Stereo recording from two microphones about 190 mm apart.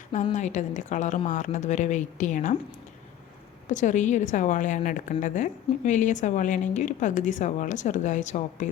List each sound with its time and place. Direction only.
0.3 s a woman's voice: 40° left (ahead or behind)
3.7 s a woman's voice: 40° left (ahead or behind)